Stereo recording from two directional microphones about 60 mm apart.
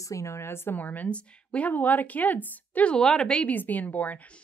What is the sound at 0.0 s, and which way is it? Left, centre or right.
Speech, left.